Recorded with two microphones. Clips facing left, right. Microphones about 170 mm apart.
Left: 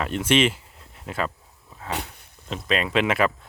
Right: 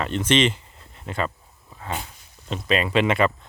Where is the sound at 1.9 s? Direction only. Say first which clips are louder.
Left 1 dB; 70° left (ahead or behind).